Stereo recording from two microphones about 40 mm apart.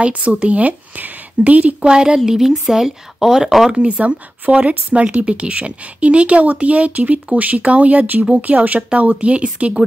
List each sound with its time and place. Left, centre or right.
0.0 s speech: right
1.8 s speech: right
3.8 s speech: right